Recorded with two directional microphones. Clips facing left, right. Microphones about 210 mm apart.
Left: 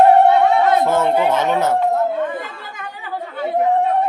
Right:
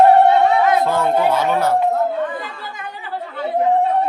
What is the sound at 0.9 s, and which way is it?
Speech, 20° left (ahead or behind).